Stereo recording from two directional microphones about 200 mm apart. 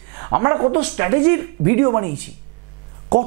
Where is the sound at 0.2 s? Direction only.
20° right (ahead or behind).